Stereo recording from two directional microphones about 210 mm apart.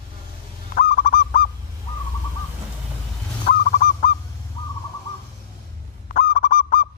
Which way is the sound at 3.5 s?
40° left (ahead or behind).